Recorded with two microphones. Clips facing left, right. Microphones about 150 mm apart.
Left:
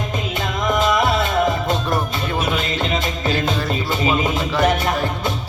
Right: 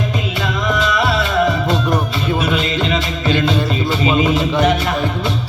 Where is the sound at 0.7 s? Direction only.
50° left (ahead or behind).